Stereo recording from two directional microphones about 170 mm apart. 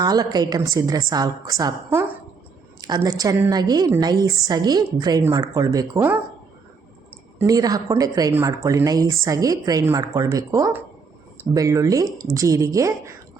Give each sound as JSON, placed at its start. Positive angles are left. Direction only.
{"t": 0.0, "sound": "speech", "side_deg": -25}
{"t": 7.3, "sound": "speech", "side_deg": -20}